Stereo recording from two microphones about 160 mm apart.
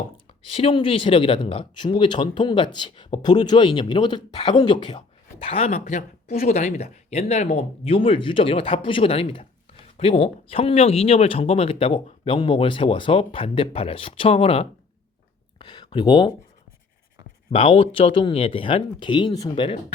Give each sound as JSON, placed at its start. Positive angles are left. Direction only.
{"t": 0.3, "sound": "speech", "side_deg": 35}
{"t": 15.5, "sound": "a sound", "side_deg": 30}
{"t": 17.5, "sound": "speech", "side_deg": 35}